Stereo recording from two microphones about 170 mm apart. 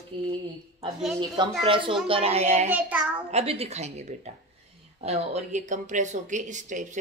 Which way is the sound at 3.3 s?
35° right (ahead or behind).